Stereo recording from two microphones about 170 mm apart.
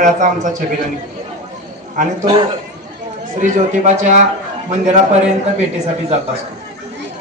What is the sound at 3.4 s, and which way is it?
A man's voice, 45° right (ahead or behind).